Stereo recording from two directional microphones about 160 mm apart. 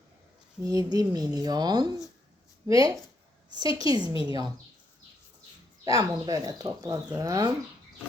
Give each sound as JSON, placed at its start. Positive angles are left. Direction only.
{"t": 0.6, "sound": "speech", "side_deg": -20}
{"t": 3.6, "sound": "a woman's voice", "side_deg": 35}
{"t": 3.8, "sound": "speech", "side_deg": -25}
{"t": 5.8, "sound": "speech", "side_deg": -20}